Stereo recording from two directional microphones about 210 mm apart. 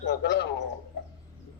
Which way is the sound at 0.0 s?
55° left (ahead or behind).